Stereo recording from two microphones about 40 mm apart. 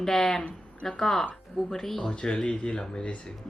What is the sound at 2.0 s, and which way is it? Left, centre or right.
Speech, left.